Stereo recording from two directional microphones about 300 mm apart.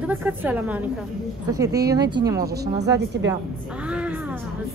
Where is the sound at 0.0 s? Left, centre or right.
Centre.